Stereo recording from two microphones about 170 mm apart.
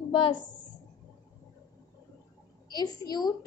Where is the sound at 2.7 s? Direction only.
25° left (ahead or behind).